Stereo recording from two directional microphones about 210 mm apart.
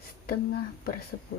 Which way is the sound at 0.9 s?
45° left (ahead or behind).